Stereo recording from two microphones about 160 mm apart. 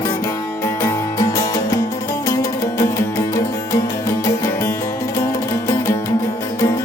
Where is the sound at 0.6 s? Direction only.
15° left (ahead or behind).